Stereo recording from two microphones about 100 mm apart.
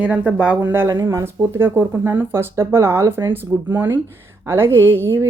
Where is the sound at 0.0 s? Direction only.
15° right (ahead or behind).